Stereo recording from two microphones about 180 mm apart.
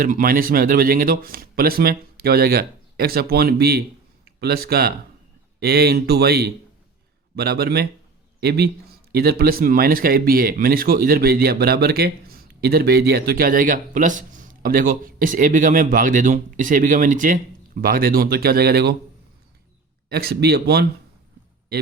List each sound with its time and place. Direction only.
0.0 s a man's voice: 50° right (ahead or behind)
20.1 s a man's voice: 60° right (ahead or behind)